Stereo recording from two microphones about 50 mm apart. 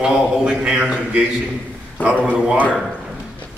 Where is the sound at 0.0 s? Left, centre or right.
Centre.